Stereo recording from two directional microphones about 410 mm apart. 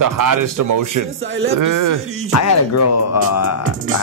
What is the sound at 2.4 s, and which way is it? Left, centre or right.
Speech, left.